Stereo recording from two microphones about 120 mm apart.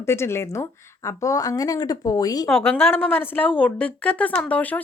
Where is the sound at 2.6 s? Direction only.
20° left (ahead or behind).